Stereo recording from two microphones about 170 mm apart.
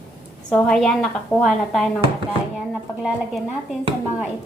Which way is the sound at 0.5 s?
Centre (ahead or behind).